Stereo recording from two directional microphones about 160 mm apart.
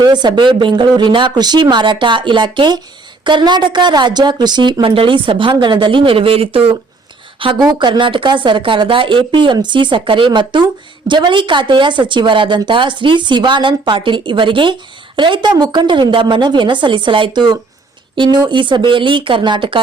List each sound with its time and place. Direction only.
0.0 s a woman's voice: 25° right (ahead or behind)